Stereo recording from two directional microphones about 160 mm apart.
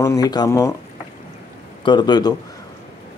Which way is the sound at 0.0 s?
20° left (ahead or behind).